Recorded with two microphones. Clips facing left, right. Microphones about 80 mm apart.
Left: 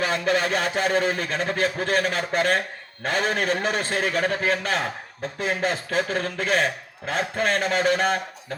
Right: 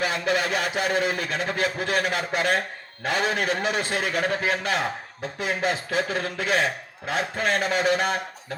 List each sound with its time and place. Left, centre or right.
0.0 s a man's voice: left